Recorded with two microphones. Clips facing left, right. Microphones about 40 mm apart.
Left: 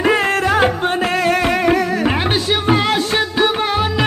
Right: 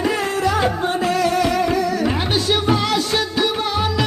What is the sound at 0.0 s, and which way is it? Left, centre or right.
Music, left.